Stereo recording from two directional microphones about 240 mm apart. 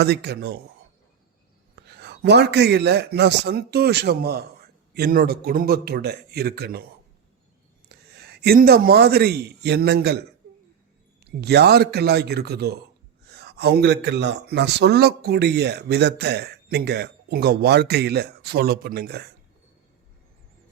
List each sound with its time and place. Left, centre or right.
0.0 s speech: right
1.7 s a man's voice: right
7.9 s a man's voice: right
11.3 s a man's voice: right